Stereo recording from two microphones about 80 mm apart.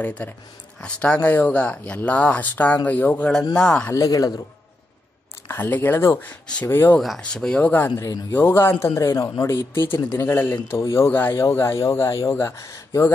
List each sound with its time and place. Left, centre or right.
0.0 s speech: centre
3.9 s a man's voice: left
5.5 s speech: left
7.2 s a man's voice: centre; by 11.4 s left
11.5 s a man's voice: left